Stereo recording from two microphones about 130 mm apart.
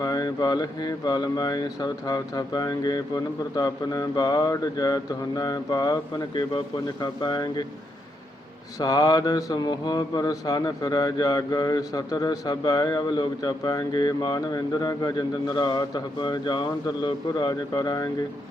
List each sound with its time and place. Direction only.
0.0 s speech: 30° left (ahead or behind)
8.8 s speech: 30° left (ahead or behind)